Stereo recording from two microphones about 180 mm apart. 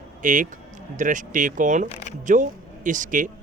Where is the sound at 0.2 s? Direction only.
45° right (ahead or behind).